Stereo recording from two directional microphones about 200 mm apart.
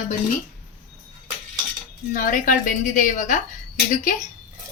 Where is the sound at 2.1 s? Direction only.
40° left (ahead or behind).